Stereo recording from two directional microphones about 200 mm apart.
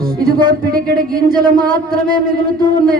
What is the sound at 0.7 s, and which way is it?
Speech, 50° right (ahead or behind).